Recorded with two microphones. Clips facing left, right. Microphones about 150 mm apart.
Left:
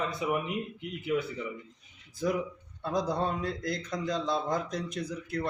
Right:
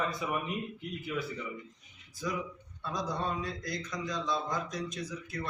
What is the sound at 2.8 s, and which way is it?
A man's voice, 55° left (ahead or behind).